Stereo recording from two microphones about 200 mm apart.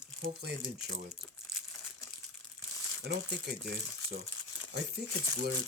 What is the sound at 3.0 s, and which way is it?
Speech, 55° right (ahead or behind).